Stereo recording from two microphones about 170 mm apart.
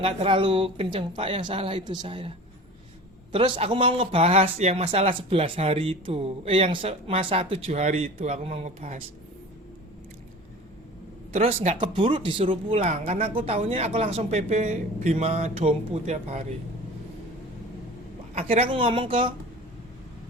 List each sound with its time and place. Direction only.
0.0 s speech: 30° right (ahead or behind)
3.3 s speech: 35° right (ahead or behind)
11.3 s speech: 45° right (ahead or behind)
11.8 s speech: 30° right (ahead or behind)
18.3 s speech: 35° right (ahead or behind)